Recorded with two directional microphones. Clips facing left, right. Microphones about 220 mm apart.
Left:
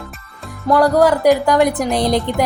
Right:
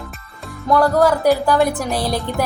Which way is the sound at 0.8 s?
15° left (ahead or behind).